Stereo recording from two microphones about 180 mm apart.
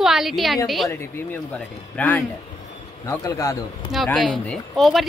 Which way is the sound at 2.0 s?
10° left (ahead or behind).